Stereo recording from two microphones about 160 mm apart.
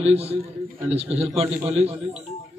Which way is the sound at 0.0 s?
40° right (ahead or behind).